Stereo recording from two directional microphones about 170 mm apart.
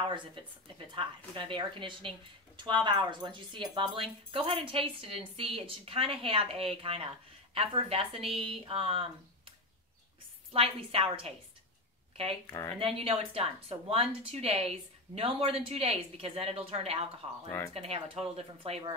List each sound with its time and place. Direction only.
0.1 s a woman's voice: 30° right (ahead or behind)
10.5 s speech: 35° right (ahead or behind)
12.7 s speech: 35° right (ahead or behind)